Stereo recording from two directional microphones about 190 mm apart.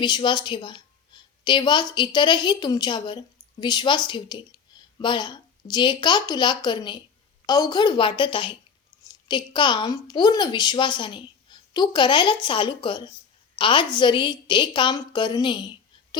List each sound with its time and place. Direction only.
0.0 s a woman's voice: 25° left (ahead or behind)